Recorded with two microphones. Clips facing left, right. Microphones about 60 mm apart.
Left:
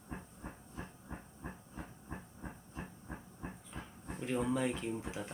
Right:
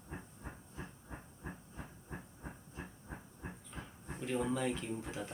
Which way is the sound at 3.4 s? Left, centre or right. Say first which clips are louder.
Left 1 dB; centre.